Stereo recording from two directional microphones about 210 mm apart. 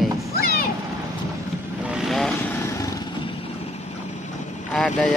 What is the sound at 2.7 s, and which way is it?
Vehicle, 15° left (ahead or behind).